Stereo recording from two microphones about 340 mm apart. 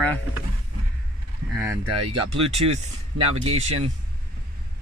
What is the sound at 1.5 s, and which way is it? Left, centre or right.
Speech, centre.